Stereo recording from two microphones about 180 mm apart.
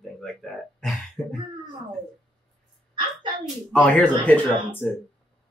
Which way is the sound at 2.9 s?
25° right (ahead or behind).